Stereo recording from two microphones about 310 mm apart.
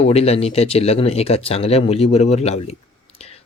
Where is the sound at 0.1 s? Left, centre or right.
Centre.